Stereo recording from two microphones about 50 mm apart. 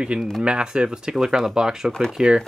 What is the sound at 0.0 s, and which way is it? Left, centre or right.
Speech, centre.